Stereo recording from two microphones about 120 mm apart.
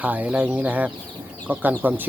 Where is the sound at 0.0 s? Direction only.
10° right (ahead or behind).